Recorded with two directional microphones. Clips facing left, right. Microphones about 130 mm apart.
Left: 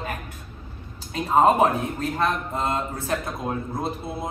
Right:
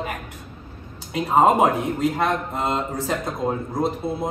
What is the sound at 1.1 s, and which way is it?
A man's voice, 15° right (ahead or behind).